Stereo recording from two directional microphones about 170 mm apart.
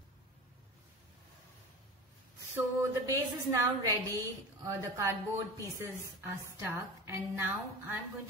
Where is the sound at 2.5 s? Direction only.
15° right (ahead or behind).